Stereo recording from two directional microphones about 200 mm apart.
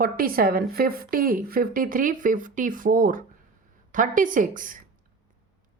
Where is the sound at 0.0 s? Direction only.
45° right (ahead or behind).